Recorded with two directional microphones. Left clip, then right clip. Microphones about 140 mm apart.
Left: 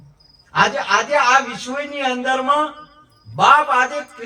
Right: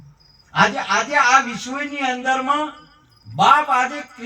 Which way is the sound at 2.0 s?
25° left (ahead or behind).